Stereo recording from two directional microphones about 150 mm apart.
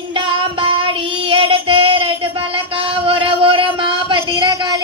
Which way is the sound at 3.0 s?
35° right (ahead or behind).